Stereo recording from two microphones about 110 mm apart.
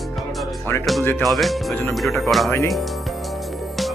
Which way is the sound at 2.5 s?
25° left (ahead or behind).